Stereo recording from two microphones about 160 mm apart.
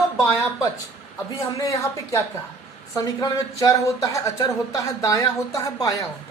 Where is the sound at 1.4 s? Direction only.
20° left (ahead or behind).